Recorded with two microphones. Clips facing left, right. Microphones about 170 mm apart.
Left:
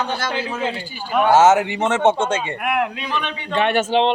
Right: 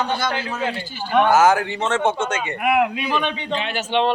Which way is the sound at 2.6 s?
5° right (ahead or behind).